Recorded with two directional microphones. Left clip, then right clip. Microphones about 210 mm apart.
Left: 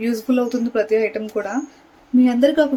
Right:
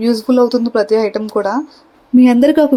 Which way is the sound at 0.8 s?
15° right (ahead or behind).